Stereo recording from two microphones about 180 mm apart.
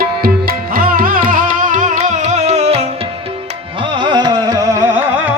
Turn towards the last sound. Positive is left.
turn(degrees=-15)  # may be behind; listen again after turning